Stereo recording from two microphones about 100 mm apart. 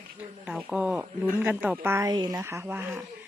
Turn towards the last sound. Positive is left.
turn(degrees=-25)  # may be behind; listen again after turning